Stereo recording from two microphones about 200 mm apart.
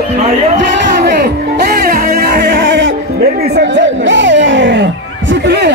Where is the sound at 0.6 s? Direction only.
55° right (ahead or behind).